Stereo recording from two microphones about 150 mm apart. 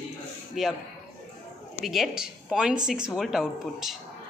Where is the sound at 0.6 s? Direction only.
Centre (ahead or behind).